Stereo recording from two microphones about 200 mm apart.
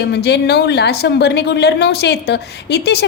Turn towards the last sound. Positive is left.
turn(degrees=55)  # may be behind; listen again after turning